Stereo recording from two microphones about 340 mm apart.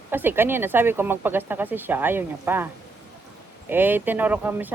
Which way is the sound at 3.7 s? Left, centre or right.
Centre.